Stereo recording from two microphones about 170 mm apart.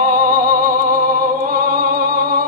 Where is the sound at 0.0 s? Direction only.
55° right (ahead or behind).